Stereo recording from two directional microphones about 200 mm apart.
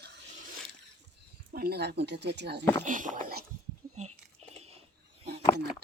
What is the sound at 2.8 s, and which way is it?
Speech, 40° right (ahead or behind).